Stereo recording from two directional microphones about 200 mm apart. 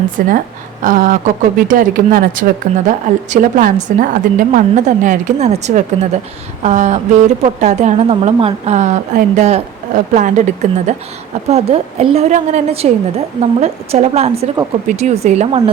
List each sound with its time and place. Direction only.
0.3 s speech: 40° right (ahead or behind)